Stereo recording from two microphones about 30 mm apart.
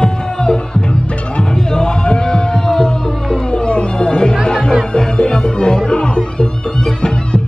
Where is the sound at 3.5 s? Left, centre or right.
Left.